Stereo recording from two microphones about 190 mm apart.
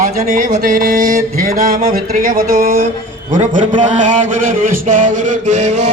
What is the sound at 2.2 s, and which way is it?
Music, 50° right (ahead or behind).